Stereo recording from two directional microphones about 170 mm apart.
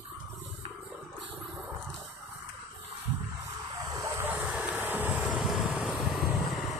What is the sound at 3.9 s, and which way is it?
Vehicle, 15° right (ahead or behind).